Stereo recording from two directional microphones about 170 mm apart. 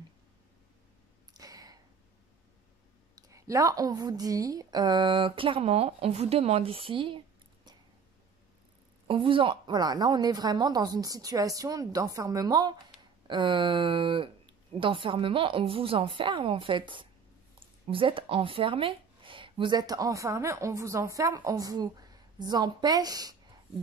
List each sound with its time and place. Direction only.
1.3 s a sound: 20° right (ahead or behind)
3.2 s a woman's voice: 20° right (ahead or behind)
9.0 s a woman's voice: 30° right (ahead or behind)